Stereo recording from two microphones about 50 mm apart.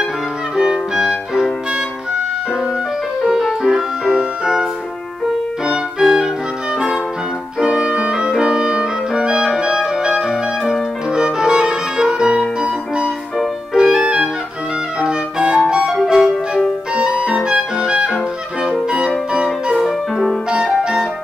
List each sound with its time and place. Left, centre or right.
0.6 s music: centre
3.3 s music: centre
3.7 s music: centre
5.7 s music: centre
7.6 s music: centre
19.4 s music: centre
20.4 s music: centre